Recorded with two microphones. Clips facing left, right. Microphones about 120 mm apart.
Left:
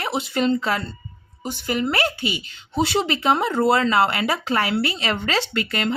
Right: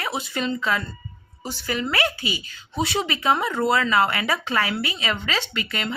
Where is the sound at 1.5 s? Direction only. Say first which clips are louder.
Left 3 dB; 20° left (ahead or behind).